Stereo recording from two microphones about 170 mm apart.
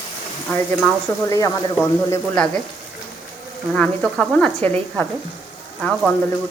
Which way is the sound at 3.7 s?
Centre (ahead or behind).